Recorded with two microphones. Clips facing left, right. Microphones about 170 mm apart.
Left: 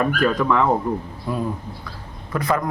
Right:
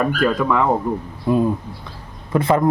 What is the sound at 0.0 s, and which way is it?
Speech, 5° right (ahead or behind).